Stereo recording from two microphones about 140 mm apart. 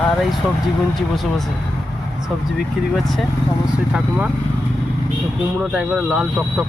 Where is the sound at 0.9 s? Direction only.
Centre (ahead or behind).